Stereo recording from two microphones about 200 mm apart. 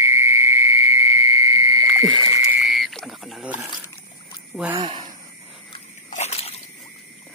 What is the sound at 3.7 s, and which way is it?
Trickle, 20° left (ahead or behind).